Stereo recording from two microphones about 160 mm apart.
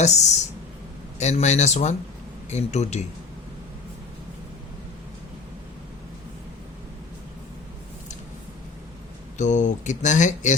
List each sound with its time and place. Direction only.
0.0 s speech: 45° left (ahead or behind)
9.4 s speech: 50° left (ahead or behind)